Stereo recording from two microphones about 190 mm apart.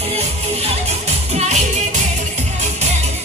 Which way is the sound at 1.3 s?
35° right (ahead or behind).